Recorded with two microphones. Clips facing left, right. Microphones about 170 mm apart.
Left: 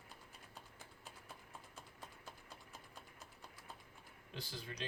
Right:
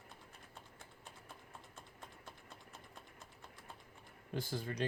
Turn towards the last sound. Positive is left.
turn(degrees=-50)  # may be behind; listen again after turning